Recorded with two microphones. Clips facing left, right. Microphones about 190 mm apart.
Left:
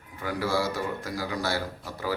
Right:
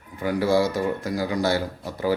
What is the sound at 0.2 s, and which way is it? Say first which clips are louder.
A man's voice: right 7 dB; 20° right (ahead or behind).